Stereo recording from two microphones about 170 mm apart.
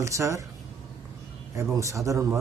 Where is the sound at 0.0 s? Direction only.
20° right (ahead or behind).